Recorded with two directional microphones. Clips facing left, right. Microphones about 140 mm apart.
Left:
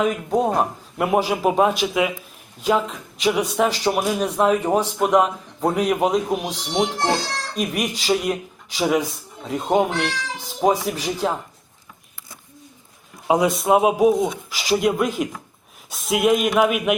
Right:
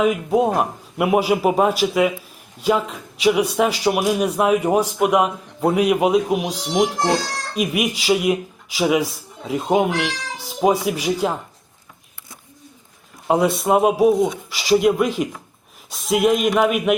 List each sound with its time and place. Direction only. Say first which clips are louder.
0.0 s a man's voice: right 3 dB; 5° right (ahead or behind)
13.2 s a man's voice: right 1 dB; centre (ahead or behind)